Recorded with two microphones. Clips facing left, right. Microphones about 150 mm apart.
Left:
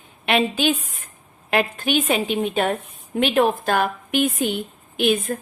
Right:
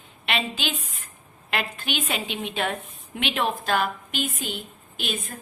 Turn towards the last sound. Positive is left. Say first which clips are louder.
# left 12 dB
turn(degrees=55)  # may be behind; listen again after turning